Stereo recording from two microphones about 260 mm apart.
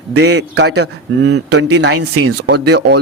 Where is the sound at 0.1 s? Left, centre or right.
Right.